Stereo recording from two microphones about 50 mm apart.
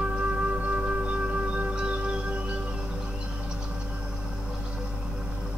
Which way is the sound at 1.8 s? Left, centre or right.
Right.